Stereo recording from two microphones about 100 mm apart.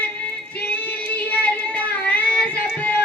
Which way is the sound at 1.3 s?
15° left (ahead or behind).